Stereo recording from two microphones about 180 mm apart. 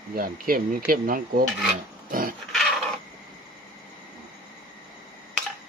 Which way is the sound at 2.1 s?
50° right (ahead or behind).